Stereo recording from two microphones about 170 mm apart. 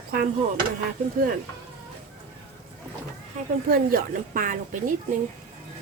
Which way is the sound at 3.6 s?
60° right (ahead or behind).